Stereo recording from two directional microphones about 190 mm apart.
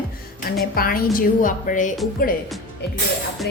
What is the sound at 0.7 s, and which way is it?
A woman's voice, 50° left (ahead or behind).